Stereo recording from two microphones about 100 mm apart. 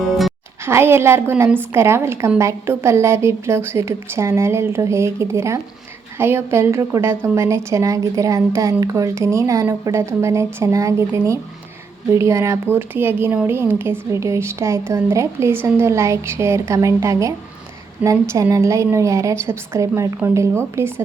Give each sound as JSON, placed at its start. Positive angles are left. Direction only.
{"t": 0.6, "sound": "speech", "side_deg": -25}